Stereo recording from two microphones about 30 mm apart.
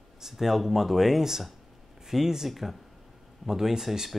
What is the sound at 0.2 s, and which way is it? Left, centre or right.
Speech, centre.